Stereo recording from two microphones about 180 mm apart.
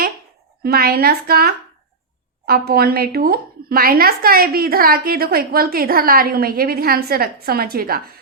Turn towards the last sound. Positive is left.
turn(degrees=-55)  # may be behind; listen again after turning